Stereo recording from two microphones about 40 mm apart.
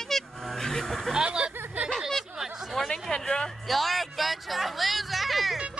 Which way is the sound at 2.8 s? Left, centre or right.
Centre.